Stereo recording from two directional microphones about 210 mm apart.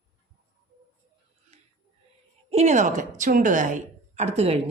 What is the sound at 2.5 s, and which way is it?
A woman's voice, 30° right (ahead or behind).